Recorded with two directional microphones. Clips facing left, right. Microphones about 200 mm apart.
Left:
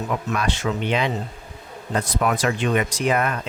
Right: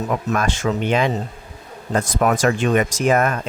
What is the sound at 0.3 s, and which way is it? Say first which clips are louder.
Speech: right 4 dB; 45° right (ahead or behind).